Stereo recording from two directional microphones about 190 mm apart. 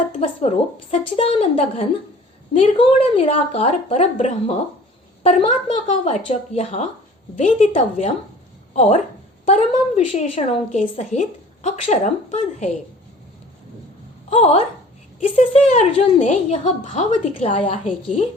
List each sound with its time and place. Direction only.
0.1 s a woman's voice: 35° left (ahead or behind)
14.3 s a woman's voice: 35° left (ahead or behind)
15.7 s a woman's voice: 35° left (ahead or behind)